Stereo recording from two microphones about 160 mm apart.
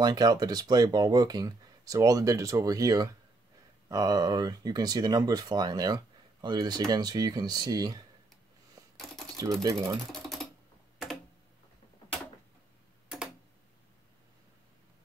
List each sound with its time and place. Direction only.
0.0 s speech: 25° right (ahead or behind)
8.9 s typing: centre (ahead or behind)
9.4 s speech: 20° right (ahead or behind)
10.1 s typing: centre (ahead or behind)